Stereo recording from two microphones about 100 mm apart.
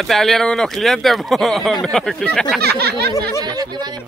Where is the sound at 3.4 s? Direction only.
45° right (ahead or behind).